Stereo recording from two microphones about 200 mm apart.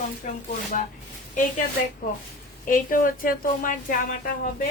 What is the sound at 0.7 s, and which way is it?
Speech, 40° left (ahead or behind).